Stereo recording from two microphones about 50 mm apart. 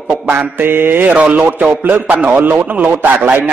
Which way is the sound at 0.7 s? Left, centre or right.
Right.